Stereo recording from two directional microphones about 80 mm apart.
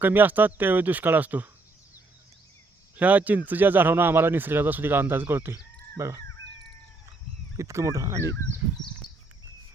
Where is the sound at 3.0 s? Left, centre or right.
Centre.